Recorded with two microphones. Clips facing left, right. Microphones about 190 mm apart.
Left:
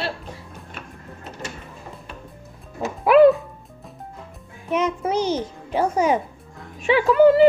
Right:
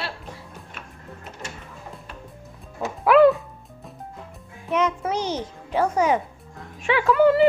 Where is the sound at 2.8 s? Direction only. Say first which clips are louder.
Left 2 dB; 15° left (ahead or behind).